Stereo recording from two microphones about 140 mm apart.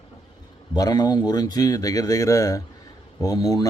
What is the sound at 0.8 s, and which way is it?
Speech, 25° left (ahead or behind).